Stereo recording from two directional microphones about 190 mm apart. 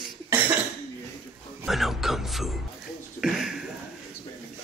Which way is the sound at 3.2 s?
5° right (ahead or behind).